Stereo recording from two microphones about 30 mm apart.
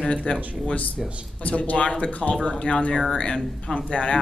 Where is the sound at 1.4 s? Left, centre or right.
Left.